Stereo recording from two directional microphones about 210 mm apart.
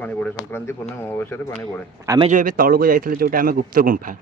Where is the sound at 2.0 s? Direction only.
20° right (ahead or behind).